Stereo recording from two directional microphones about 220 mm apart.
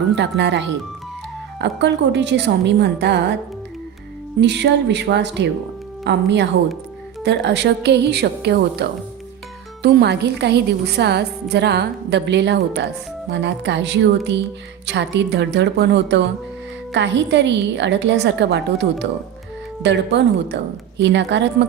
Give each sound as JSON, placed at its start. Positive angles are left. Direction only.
{"t": 0.2, "sound": "a woman's voice", "side_deg": -50}
{"t": 4.4, "sound": "a woman's voice", "side_deg": -50}